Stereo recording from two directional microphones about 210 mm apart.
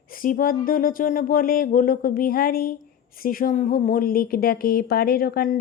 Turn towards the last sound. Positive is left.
turn(degrees=45)  # may be behind; listen again after turning